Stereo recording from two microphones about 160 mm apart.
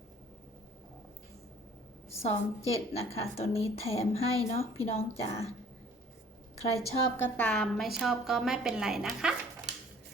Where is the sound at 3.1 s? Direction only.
40° left (ahead or behind).